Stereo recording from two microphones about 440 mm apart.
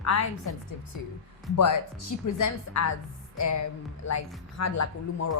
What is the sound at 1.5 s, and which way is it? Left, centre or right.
A woman's voice, left.